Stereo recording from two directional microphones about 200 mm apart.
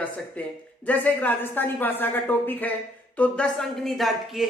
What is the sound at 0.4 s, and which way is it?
A woman's voice, 5° left (ahead or behind).